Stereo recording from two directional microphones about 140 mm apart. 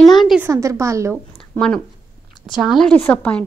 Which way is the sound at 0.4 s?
20° right (ahead or behind).